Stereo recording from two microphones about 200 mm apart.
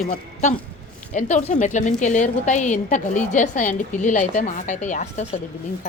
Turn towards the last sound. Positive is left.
turn(degrees=35)  # may be behind; listen again after turning